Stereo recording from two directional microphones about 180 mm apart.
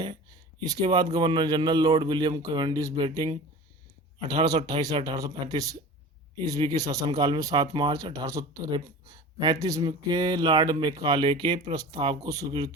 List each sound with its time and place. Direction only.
0.6 s speech: 20° right (ahead or behind)